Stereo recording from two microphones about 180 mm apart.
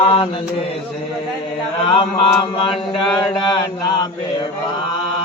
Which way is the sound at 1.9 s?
30° left (ahead or behind).